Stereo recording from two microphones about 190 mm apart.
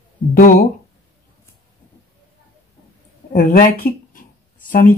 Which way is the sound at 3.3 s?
50° left (ahead or behind).